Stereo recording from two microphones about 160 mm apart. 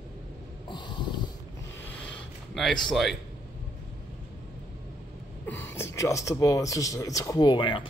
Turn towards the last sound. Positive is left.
turn(degrees=30)  # may be behind; listen again after turning